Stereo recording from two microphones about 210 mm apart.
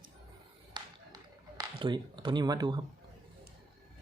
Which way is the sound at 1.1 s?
15° right (ahead or behind).